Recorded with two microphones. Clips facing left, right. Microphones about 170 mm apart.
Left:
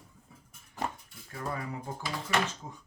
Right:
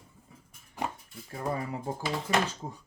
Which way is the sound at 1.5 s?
30° right (ahead or behind).